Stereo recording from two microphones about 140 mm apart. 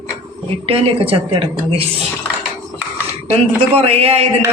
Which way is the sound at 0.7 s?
40° right (ahead or behind).